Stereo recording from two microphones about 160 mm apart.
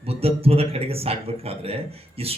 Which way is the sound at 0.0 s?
40° right (ahead or behind).